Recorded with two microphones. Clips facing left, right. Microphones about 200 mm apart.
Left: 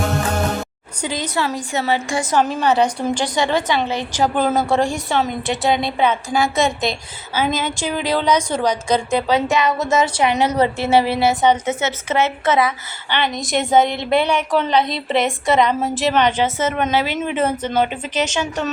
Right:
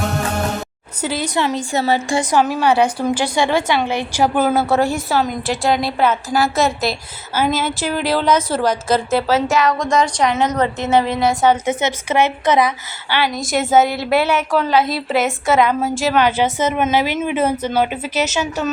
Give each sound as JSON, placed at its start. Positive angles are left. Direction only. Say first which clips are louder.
{"t": 1.0, "sound": "a woman's voice", "louder": "right 3 dB", "side_deg": -10}
{"t": 1.4, "sound": "a woman's voice", "louder": "right 3 dB", "side_deg": -20}
{"t": 1.7, "sound": "a woman's voice", "louder": "right 2 dB", "side_deg": -35}
{"t": 2.6, "sound": "a woman's voice", "louder": "right 1 dB", "side_deg": -10}
{"t": 11.4, "sound": "a woman's voice", "louder": "right 1 dB", "side_deg": -15}
{"t": 13.1, "sound": "a woman's voice", "louder": "right 1 dB", "side_deg": -5}